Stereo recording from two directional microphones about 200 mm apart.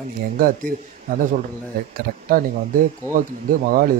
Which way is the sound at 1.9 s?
45° right (ahead or behind).